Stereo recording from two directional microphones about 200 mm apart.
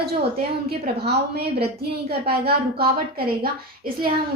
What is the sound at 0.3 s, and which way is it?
A woman's voice, 55° right (ahead or behind).